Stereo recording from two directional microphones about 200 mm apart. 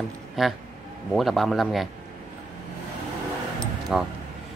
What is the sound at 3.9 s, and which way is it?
Speech, centre (ahead or behind).